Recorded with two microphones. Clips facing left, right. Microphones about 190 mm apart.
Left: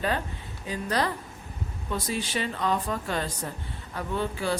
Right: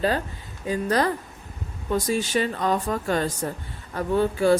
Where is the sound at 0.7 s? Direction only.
45° right (ahead or behind).